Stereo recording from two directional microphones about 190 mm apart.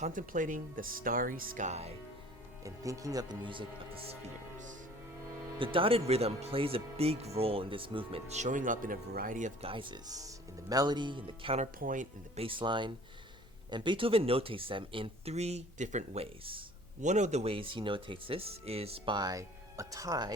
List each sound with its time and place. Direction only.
0.0 s speech: 45° right (ahead or behind)
2.6 s speech: 15° right (ahead or behind)
5.5 s speech: 25° right (ahead or behind)
9.6 s speech: 25° right (ahead or behind); by 12.0 s 45° right (ahead or behind)
12.4 s speech: 25° right (ahead or behind)